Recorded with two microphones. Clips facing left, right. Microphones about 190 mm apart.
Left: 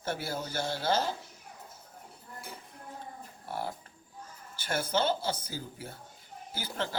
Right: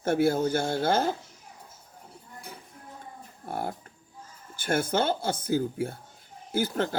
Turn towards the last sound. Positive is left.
turn(degrees=-50)  # may be behind; listen again after turning